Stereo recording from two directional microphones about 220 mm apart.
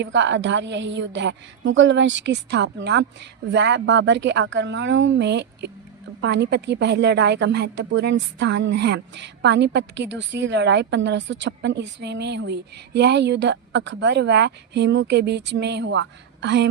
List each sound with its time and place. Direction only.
0.0 s a woman's voice: 55° right (ahead or behind)